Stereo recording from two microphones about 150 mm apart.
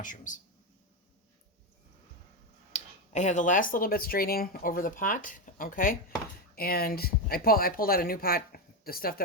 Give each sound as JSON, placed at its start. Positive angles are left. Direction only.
{"t": 0.0, "sound": "speech", "side_deg": 60}
{"t": 2.7, "sound": "speech", "side_deg": 50}
{"t": 6.6, "sound": "speech", "side_deg": 90}